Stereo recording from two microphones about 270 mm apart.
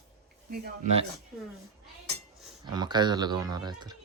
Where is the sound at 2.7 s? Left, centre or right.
Centre.